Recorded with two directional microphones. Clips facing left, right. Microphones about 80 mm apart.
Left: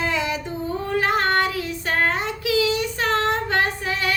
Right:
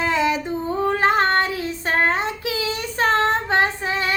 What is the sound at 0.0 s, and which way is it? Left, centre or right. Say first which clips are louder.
Female singing: right 4 dB; right.